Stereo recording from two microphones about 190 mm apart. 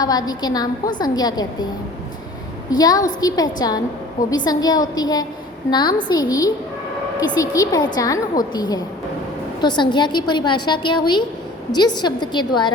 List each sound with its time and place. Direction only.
0.0 s a woman's voice: 20° left (ahead or behind)
2.6 s a woman's voice: 20° left (ahead or behind)